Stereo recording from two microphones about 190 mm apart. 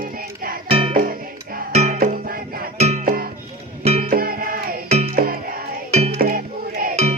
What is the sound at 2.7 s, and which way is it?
Music, 35° right (ahead or behind).